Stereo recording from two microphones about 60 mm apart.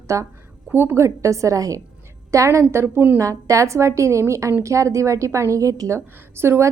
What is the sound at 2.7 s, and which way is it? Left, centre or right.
Speech, right.